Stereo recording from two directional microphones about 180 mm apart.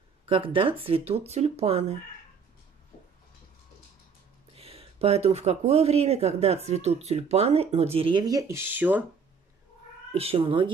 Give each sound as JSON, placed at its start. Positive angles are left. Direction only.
{"t": 0.3, "sound": "speech", "side_deg": -30}
{"t": 4.6, "sound": "speech", "side_deg": -35}
{"t": 10.1, "sound": "speech", "side_deg": -30}